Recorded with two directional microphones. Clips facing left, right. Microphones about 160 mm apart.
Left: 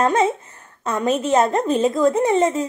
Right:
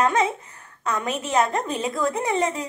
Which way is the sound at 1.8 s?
25° left (ahead or behind).